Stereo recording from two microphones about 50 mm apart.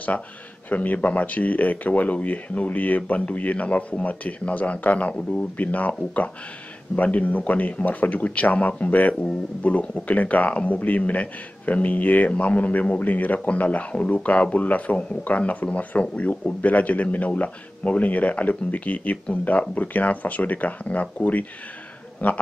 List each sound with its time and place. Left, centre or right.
0.7 s a man's voice: left